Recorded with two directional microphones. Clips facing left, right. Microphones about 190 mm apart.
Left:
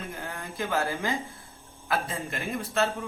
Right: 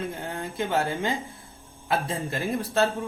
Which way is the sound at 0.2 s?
20° right (ahead or behind).